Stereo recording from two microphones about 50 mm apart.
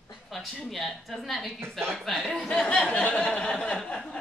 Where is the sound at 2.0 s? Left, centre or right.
Centre.